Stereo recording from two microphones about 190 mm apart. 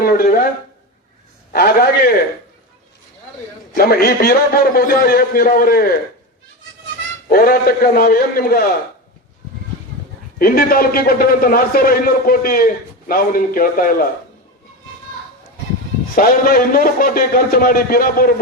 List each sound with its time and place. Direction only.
0.0 s a sound: 50° left (ahead or behind)
1.5 s a man's voice: 50° left (ahead or behind)
3.8 s a man's voice: 50° left (ahead or behind)
7.3 s a man's voice: 50° left (ahead or behind)
10.3 s a man's voice: 50° left (ahead or behind)
16.1 s a man's voice: 45° left (ahead or behind)